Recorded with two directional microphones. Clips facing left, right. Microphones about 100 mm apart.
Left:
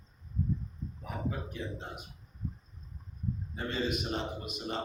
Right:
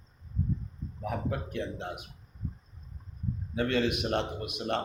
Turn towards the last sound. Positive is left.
turn(degrees=-65)  # may be behind; listen again after turning